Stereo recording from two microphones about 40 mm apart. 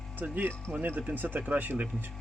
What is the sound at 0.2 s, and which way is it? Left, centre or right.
Speech, right.